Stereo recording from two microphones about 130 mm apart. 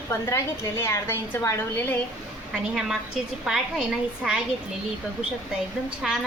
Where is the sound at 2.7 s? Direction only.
5° right (ahead or behind).